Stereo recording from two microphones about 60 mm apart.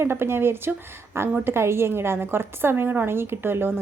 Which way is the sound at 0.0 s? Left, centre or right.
Right.